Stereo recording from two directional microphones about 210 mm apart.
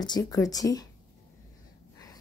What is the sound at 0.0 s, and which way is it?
Speech, 20° left (ahead or behind).